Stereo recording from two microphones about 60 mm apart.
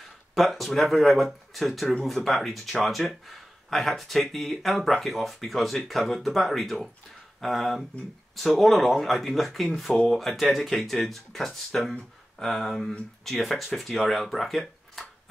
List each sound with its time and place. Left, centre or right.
0.3 s speech: centre